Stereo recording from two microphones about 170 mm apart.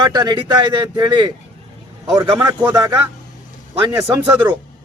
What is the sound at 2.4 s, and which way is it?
Speech, 10° right (ahead or behind).